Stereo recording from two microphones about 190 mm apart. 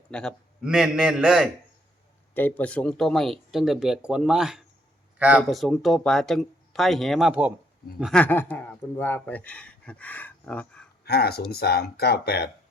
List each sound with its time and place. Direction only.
0.1 s speech: 5° left (ahead or behind)
2.3 s speech: 10° left (ahead or behind)
11.0 s speech: 55° left (ahead or behind)